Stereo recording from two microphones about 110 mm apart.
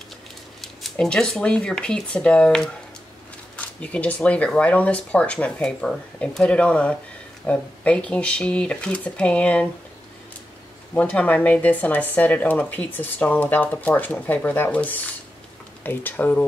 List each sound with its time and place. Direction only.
0.6 s speech: 5° left (ahead or behind)
11.0 s speech: 15° left (ahead or behind)